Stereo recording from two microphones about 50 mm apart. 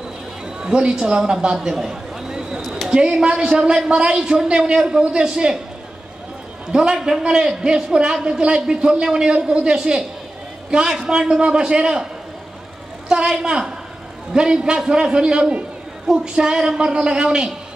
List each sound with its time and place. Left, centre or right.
0.6 s a man's voice: centre
6.7 s a man's voice: centre
13.4 s a man's voice: centre